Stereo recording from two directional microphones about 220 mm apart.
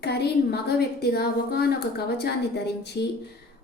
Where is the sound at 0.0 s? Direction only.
45° left (ahead or behind).